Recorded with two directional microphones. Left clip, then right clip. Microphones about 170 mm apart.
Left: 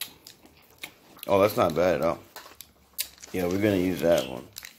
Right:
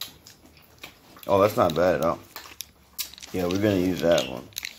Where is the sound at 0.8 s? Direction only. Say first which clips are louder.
Left 2 dB; 20° left (ahead or behind).